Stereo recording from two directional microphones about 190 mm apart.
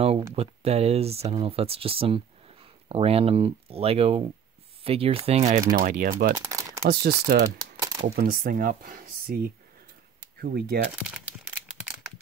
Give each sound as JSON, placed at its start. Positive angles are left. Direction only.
{"t": 0.4, "sound": "speech", "side_deg": -35}
{"t": 5.8, "sound": "speech", "side_deg": -45}
{"t": 6.3, "sound": "crumpling", "side_deg": -15}
{"t": 6.9, "sound": "speech", "side_deg": -55}
{"t": 7.4, "sound": "typing", "side_deg": -20}
{"t": 8.2, "sound": "speech", "side_deg": -50}
{"t": 11.0, "sound": "crumpling", "side_deg": -5}